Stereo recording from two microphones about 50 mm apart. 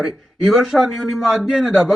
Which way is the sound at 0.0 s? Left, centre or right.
Centre.